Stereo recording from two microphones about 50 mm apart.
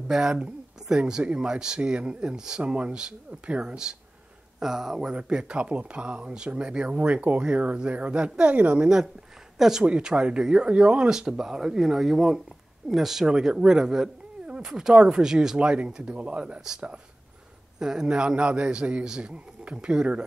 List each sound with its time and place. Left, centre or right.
0.1 s speech: centre
4.6 s speech: centre
5.1 s speech: right
8.8 s speech: centre
9.8 s speech: right
14.4 s cat: centre
14.7 s speech: centre
17.7 s speech: centre